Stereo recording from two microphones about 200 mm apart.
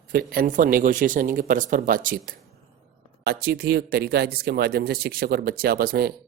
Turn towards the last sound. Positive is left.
turn(degrees=-50)  # may be behind; listen again after turning